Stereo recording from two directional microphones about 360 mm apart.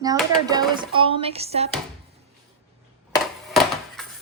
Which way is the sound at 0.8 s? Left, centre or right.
Centre.